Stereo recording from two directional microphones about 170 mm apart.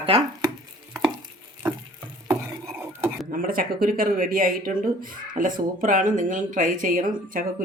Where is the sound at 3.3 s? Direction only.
55° right (ahead or behind).